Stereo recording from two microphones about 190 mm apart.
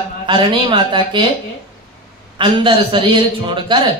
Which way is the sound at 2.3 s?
25° right (ahead or behind).